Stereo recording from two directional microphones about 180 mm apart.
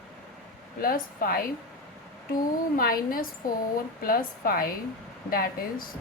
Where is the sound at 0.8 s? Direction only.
55° left (ahead or behind).